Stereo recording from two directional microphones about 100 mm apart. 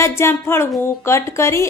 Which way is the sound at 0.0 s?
25° left (ahead or behind).